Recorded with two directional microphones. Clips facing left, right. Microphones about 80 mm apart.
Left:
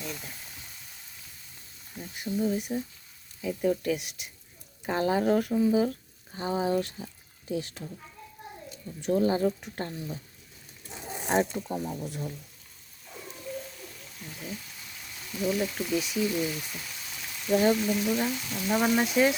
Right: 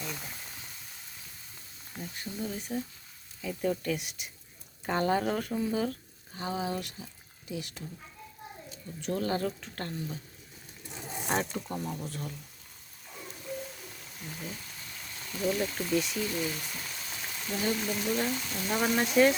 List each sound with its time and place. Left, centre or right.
0.0 s frying: centre
2.0 s speech: centre
6.3 s speech: left
9.0 s speech: centre
11.3 s speech: centre
11.7 s speech: centre
14.2 s speech: centre